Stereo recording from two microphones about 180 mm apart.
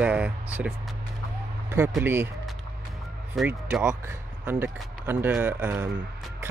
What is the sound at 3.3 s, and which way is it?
Speech, 10° right (ahead or behind).